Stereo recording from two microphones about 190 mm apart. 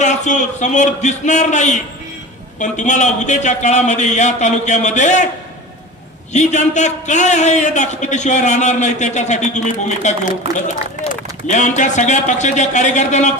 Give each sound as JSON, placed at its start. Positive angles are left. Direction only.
{"t": 0.0, "sound": "a man's voice", "side_deg": 40}
{"t": 6.3, "sound": "a man's voice", "side_deg": 35}